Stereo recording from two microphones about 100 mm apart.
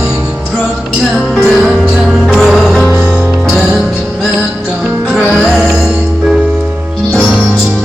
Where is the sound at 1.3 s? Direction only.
Centre (ahead or behind).